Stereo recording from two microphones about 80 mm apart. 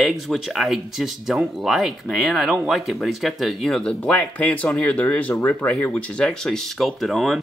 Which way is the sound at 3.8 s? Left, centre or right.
Centre.